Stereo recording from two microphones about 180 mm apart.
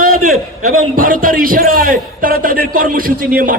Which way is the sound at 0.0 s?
50° right (ahead or behind).